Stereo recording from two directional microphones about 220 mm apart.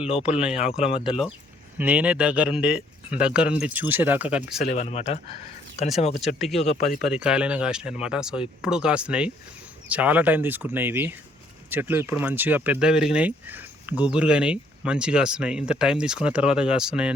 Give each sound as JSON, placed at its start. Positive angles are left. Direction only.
{"t": 0.9, "sound": "speech", "side_deg": 25}
{"t": 1.8, "sound": "speech", "side_deg": -5}
{"t": 4.4, "sound": "speech", "side_deg": 40}
{"t": 6.1, "sound": "speech", "side_deg": 0}
{"t": 6.6, "sound": "speech", "side_deg": 30}
{"t": 7.0, "sound": "speech", "side_deg": -5}